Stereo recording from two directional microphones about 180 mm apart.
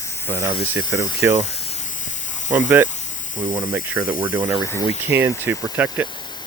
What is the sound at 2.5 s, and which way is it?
Speech, 10° right (ahead or behind).